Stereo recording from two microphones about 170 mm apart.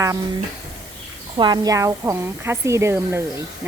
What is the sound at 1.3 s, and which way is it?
Speech, 25° right (ahead or behind).